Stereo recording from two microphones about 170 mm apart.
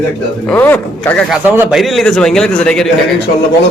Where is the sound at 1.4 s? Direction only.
10° right (ahead or behind).